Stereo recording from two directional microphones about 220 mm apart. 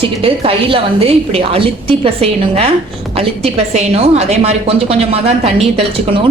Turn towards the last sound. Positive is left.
turn(degrees=-25)  # may be behind; listen again after turning